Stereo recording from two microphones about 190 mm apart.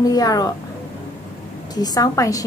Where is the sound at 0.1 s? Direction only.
20° left (ahead or behind).